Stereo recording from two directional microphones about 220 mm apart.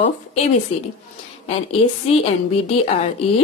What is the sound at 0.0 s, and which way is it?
Speech, 30° left (ahead or behind).